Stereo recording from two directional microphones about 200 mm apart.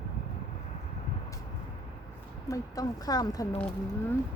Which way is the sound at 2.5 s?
20° left (ahead or behind).